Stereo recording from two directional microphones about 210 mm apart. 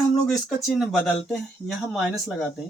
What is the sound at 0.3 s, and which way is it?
Speech, centre (ahead or behind).